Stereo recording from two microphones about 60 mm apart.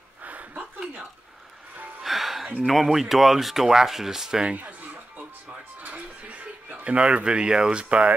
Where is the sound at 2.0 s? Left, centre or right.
Centre.